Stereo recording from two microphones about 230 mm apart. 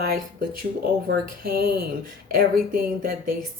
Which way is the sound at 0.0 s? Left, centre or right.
Right.